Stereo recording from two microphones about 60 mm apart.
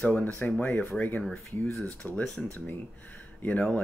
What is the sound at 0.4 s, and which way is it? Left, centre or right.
Speech, left.